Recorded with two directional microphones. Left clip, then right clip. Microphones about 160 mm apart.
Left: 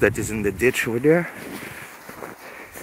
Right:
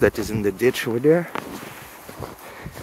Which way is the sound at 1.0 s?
15° left (ahead or behind).